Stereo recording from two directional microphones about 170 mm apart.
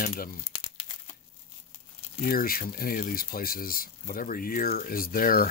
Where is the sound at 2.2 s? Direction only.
60° left (ahead or behind).